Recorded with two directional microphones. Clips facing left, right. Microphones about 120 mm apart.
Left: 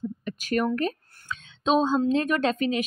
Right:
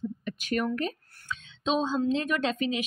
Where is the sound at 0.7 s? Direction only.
45° left (ahead or behind).